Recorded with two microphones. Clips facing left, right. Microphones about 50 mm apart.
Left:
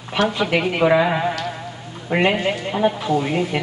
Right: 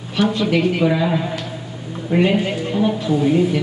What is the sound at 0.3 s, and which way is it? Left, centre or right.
A man's voice, left.